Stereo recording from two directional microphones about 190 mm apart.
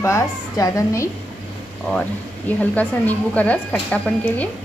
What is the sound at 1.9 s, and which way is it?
Speech, 5° left (ahead or behind).